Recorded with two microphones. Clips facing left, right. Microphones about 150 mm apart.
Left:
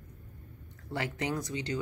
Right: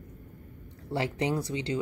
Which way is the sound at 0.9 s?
30° right (ahead or behind).